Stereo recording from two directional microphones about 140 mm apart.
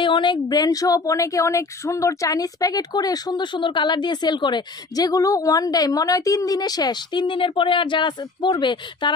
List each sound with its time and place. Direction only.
0.0 s speech: 35° left (ahead or behind)